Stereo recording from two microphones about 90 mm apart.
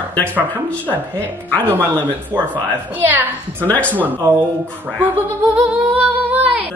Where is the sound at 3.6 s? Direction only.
15° left (ahead or behind).